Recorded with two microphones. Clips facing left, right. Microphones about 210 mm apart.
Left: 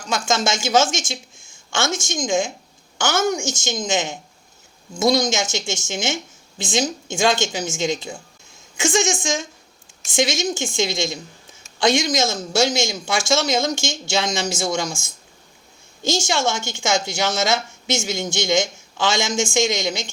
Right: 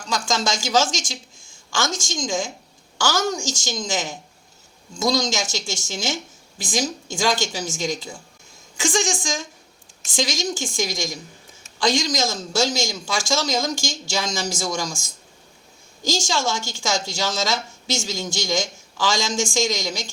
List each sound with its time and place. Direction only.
0.1 s a woman's voice: 25° left (ahead or behind)
16.0 s a woman's voice: 20° left (ahead or behind)